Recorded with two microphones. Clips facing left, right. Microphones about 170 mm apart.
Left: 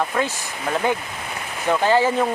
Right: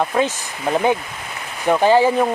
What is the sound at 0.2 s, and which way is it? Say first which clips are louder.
Speech: right 4 dB; 20° right (ahead or behind).